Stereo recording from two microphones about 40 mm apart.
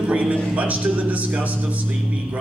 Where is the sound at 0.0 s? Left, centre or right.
Right.